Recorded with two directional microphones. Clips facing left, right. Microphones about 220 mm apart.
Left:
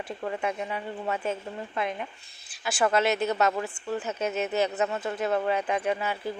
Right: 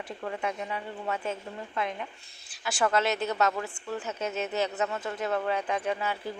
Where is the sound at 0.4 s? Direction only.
10° left (ahead or behind).